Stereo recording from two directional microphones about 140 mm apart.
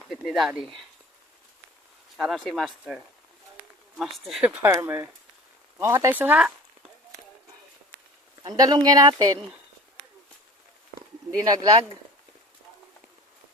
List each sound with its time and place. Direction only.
0.1 s speech: centre (ahead or behind)
2.1 s speech: centre (ahead or behind); by 6.1 s 20° right (ahead or behind)
6.1 s speech: 10° right (ahead or behind)
8.4 s speech: 25° right (ahead or behind)
11.4 s speech: 30° right (ahead or behind)